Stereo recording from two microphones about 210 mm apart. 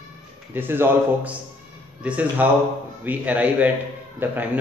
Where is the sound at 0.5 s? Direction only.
10° right (ahead or behind).